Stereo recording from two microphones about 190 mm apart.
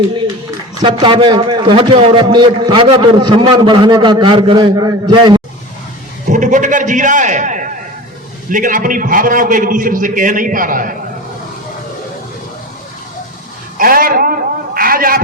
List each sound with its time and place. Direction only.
0.8 s a man's voice: 25° right (ahead or behind)
6.2 s a man's voice: 40° right (ahead or behind)
13.7 s a sound: 50° right (ahead or behind)